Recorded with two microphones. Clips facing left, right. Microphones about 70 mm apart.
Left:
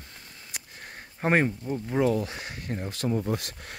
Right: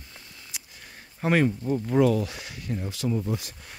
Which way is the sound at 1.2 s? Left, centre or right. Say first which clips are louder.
Right 1 dB; left.